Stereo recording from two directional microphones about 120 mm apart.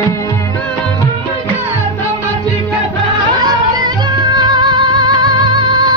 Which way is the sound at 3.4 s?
35° right (ahead or behind).